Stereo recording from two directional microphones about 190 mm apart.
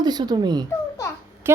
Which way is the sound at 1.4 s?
15° right (ahead or behind).